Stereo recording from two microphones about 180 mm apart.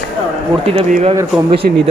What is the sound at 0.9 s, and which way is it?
Speech, 35° right (ahead or behind).